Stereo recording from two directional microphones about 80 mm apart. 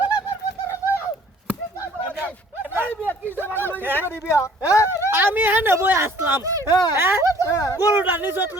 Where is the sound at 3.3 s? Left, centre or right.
Right.